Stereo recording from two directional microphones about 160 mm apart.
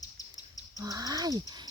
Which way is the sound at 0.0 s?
20° left (ahead or behind).